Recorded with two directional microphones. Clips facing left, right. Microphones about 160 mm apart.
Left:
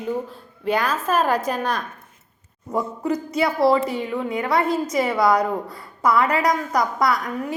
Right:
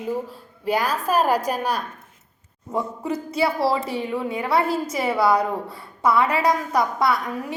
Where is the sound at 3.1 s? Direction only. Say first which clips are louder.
Left 1 dB; 30° right (ahead or behind).